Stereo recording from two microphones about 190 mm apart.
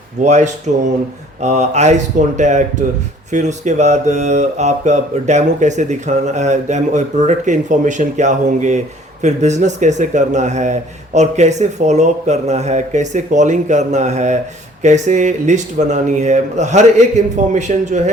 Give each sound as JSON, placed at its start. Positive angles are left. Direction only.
{"t": 0.2, "sound": "mantra", "side_deg": -40}